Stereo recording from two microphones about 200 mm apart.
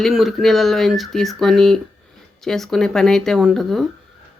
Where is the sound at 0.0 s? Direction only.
Centre (ahead or behind).